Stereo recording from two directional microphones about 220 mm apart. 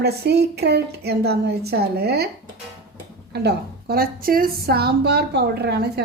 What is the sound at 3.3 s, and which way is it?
A woman's voice, 45° right (ahead or behind).